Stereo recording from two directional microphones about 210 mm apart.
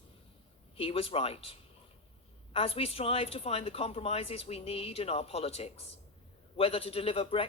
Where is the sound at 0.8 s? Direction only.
25° left (ahead or behind).